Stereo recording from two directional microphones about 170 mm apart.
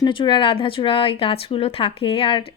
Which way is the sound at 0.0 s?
30° left (ahead or behind).